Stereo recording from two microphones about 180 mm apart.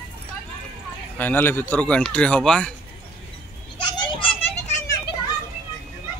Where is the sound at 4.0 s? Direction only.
25° left (ahead or behind).